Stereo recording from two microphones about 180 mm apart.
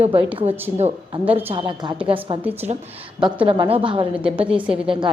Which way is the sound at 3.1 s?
30° right (ahead or behind).